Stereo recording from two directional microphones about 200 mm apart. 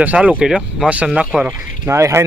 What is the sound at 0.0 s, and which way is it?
Speech, 5° right (ahead or behind).